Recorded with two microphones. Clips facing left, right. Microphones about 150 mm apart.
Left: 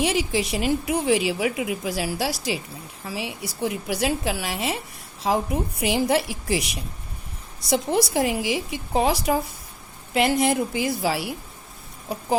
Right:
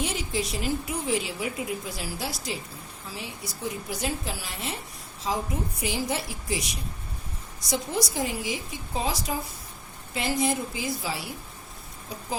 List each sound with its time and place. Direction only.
0.0 s a woman's voice: 85° left
5.2 s a woman's voice: 65° left (ahead or behind)